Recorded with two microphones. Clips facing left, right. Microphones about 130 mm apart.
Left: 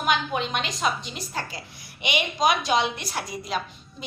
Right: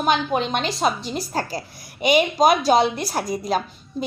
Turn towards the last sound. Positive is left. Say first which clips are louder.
# right 6 dB
turn(degrees=-40)  # may be behind; listen again after turning